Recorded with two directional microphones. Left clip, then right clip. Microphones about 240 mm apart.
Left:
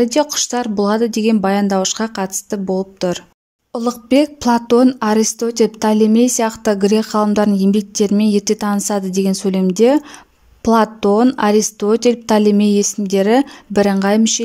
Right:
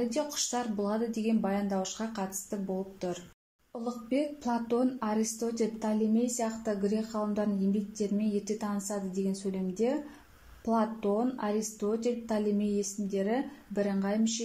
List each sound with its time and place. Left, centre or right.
0.0 s a woman's voice: left